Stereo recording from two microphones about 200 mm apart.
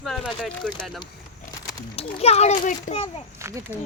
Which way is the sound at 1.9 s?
30° left (ahead or behind).